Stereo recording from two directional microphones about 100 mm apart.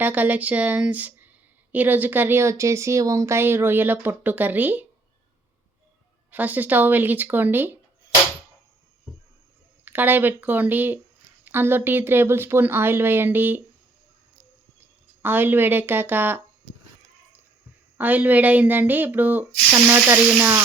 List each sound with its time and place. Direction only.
0.0 s speech: 15° right (ahead or behind)
6.3 s speech: 15° right (ahead or behind)
9.8 s speech: 20° right (ahead or behind)
15.2 s speech: 20° right (ahead or behind)
17.9 s speech: 15° right (ahead or behind)